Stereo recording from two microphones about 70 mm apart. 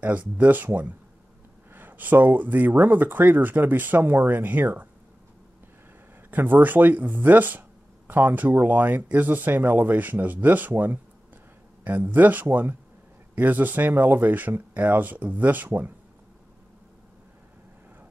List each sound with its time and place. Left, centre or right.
0.0 s speech: right
6.3 s speech: right